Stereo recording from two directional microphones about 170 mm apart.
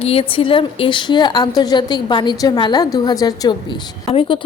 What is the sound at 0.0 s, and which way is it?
A woman's voice, 35° left (ahead or behind).